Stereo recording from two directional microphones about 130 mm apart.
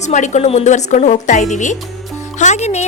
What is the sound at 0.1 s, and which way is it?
A woman's voice, 65° left (ahead or behind).